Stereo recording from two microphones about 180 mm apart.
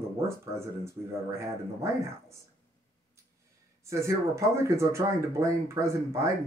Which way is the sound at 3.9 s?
15° right (ahead or behind).